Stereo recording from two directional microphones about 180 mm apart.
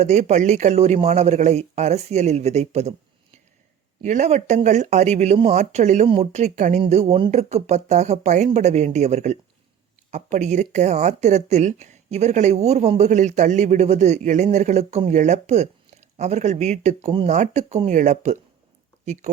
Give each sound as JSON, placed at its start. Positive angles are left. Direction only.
{"t": 0.0, "sound": "speech", "side_deg": -40}
{"t": 4.0, "sound": "speech", "side_deg": -40}